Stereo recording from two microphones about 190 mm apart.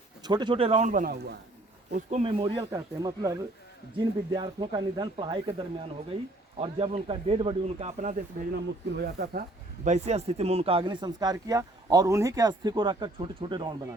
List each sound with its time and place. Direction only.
0.2 s speech: 20° right (ahead or behind)
2.6 s speech: 20° right (ahead or behind); by 8.1 s 35° right (ahead or behind)
9.0 s speech: 55° right (ahead or behind)
9.8 s speech: 35° right (ahead or behind)